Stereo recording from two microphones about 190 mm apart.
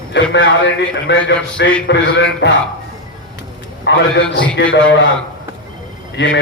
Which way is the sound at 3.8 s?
70° left (ahead or behind).